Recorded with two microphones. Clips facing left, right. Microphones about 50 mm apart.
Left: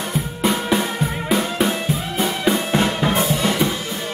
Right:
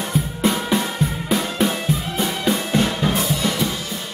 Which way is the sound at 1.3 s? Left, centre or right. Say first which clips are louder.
Left 2 dB; centre.